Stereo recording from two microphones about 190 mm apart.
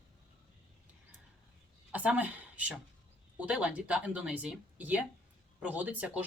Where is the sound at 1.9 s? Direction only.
5° right (ahead or behind).